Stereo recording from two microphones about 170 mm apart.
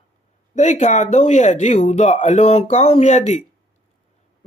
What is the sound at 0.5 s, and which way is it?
Speech, 45° left (ahead or behind).